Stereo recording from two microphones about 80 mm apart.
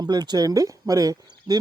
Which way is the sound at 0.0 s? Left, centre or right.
Right.